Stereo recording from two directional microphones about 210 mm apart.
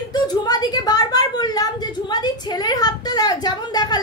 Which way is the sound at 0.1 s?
20° left (ahead or behind).